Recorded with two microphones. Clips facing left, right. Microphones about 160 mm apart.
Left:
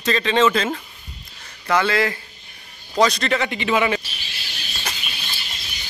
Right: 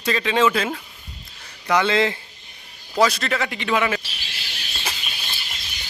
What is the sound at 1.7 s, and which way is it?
Speech, 20° right (ahead or behind).